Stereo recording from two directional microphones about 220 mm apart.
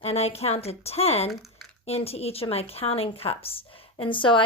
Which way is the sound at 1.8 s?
25° left (ahead or behind).